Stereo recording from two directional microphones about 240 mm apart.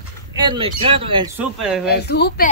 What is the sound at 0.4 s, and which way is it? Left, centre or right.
Speech, centre.